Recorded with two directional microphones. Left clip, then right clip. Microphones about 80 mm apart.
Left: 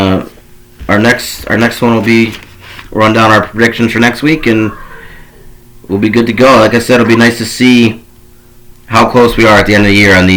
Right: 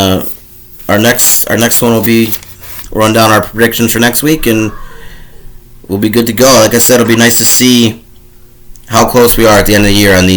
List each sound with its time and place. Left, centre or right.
0.0 s speech: right
2.3 s a sound: centre
2.9 s speech: right
5.9 s speech: right